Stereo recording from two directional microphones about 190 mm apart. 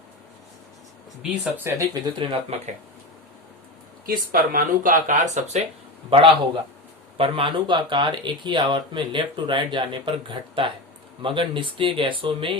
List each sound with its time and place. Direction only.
1.2 s speech: 10° right (ahead or behind)
2.0 s speech: 25° right (ahead or behind)
4.0 s speech: 50° right (ahead or behind)
6.1 s speech: 30° right (ahead or behind)